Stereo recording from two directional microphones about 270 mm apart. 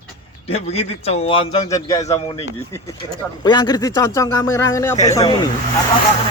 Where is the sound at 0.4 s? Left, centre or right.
Left.